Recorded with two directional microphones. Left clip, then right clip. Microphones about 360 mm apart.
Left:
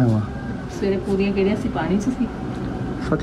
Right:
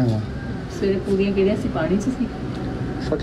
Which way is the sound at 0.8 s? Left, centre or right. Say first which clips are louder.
Right 1 dB; centre.